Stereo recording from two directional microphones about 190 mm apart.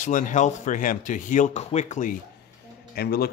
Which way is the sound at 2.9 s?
55° left (ahead or behind).